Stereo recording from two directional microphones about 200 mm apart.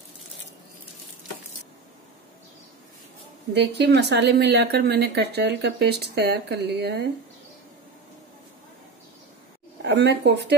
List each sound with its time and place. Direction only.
3.5 s a woman's voice: 55° right (ahead or behind)
9.8 s a woman's voice: 55° right (ahead or behind)